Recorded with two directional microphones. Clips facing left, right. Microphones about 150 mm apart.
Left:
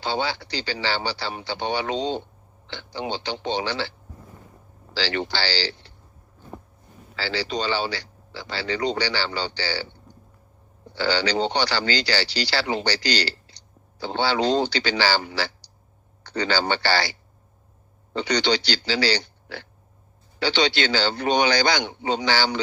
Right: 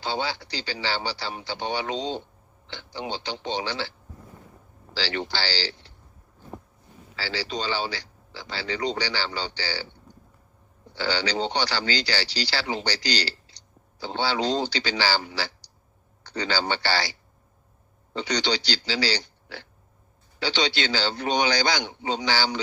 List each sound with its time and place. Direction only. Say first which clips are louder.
0.0 s speech: left 3 dB; 70° left (ahead or behind)
4.9 s speech: left 3 dB; 70° left (ahead or behind)
7.2 s speech: left 4 dB; 70° left (ahead or behind)
10.9 s speech: left 4 dB; 65° left (ahead or behind)